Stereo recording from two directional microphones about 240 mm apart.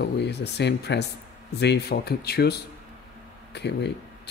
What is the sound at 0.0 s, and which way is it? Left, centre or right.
A man's voice, left.